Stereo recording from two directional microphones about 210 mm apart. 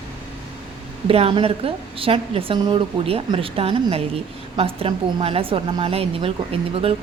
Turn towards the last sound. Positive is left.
turn(degrees=-25)  # may be behind; listen again after turning